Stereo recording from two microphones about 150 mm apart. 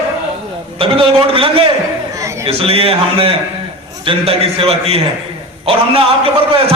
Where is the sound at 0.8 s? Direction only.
35° right (ahead or behind).